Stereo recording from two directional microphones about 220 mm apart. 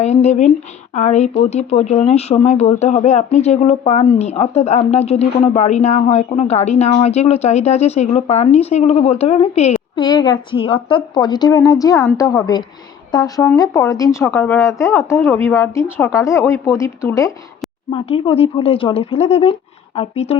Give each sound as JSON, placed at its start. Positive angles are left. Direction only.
{"t": 0.0, "sound": "a woman's voice", "side_deg": 30}
{"t": 17.9, "sound": "speech", "side_deg": 25}